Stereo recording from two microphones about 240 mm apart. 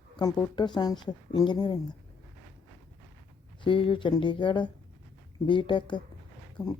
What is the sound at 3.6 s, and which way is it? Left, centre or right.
Speech, left.